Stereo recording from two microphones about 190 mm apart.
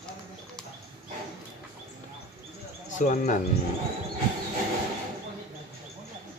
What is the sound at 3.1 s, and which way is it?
Speech, 40° left (ahead or behind).